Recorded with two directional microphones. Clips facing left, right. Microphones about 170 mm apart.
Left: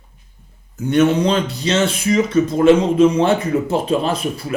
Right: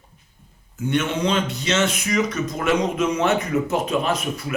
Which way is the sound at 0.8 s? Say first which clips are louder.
Left 7 dB; 35° left (ahead or behind).